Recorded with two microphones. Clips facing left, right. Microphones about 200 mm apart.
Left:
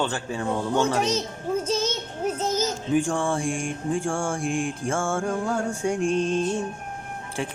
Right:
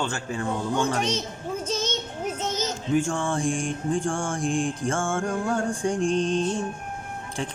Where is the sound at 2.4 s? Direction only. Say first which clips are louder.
Left 3 dB; 10° left (ahead or behind).